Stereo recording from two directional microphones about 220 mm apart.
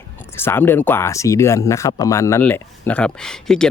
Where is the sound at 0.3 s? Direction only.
10° left (ahead or behind).